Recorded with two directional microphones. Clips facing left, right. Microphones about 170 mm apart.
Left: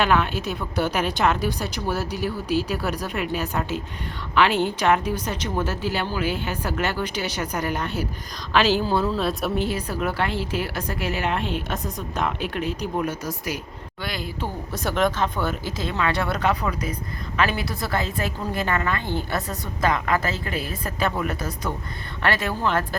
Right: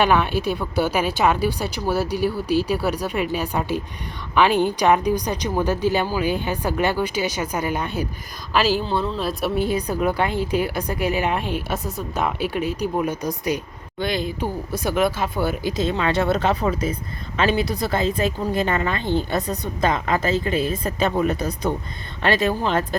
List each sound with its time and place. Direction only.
0.0 s a woman's voice: 15° right (ahead or behind)
8.8 s speech: 5° left (ahead or behind)
9.6 s a woman's voice: 15° right (ahead or behind)